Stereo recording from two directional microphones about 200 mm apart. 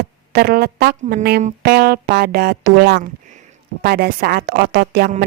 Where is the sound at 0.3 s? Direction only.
50° right (ahead or behind).